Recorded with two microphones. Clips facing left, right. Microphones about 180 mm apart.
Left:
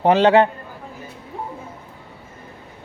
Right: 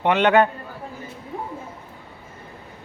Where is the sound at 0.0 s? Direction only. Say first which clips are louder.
Left 3 dB; 35° left (ahead or behind).